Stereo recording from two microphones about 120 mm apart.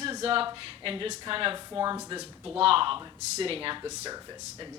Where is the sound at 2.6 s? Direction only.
50° right (ahead or behind).